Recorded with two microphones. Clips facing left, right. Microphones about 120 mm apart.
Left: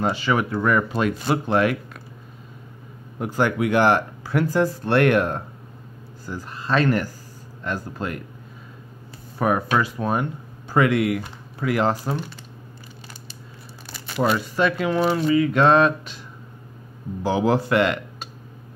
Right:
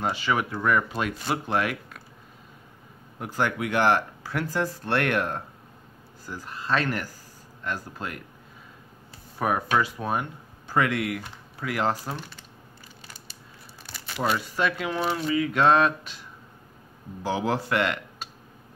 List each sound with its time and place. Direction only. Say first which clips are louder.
0.0 s speech: left 4 dB; 10° right (ahead or behind)
3.2 s speech: left 6 dB; 5° left (ahead or behind)
6.4 s speech: left 5 dB; centre (ahead or behind)
9.4 s speech: left 3 dB; 5° right (ahead or behind)
10.7 s speech: left 6 dB; 10° left (ahead or behind)
11.9 s speech: left 5 dB; 20° left (ahead or behind)
14.2 s speech: left 5 dB; 5° right (ahead or behind)
17.2 s speech: left 6 dB; 5° left (ahead or behind)